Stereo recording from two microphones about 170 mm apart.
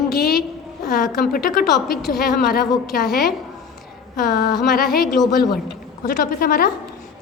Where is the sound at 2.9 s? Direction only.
60° left (ahead or behind).